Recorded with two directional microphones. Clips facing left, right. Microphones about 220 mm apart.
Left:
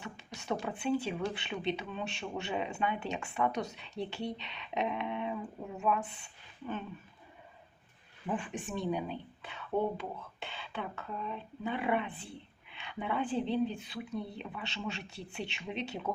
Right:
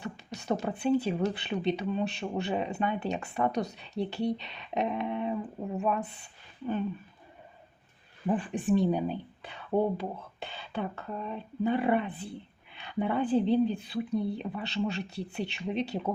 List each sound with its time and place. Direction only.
0.6 s speech: 40° right (ahead or behind)
8.3 s speech: 35° right (ahead or behind)